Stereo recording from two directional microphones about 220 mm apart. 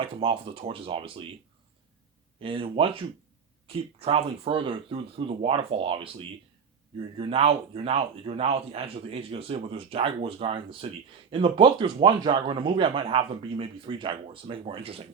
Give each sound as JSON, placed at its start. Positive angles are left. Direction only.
{"t": 0.0, "sound": "speech", "side_deg": -25}
{"t": 2.4, "sound": "speech", "side_deg": -25}